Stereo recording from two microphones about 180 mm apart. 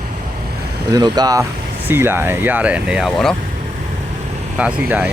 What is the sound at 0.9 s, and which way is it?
Speech, 20° right (ahead or behind).